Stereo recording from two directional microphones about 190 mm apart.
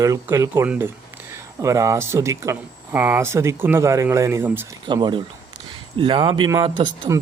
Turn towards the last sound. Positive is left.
turn(degrees=-20)  # may be behind; listen again after turning